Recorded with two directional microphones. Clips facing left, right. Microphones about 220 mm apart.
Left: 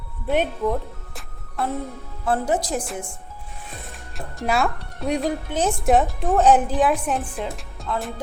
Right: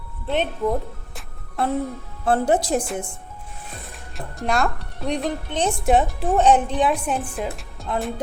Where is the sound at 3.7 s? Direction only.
Centre (ahead or behind).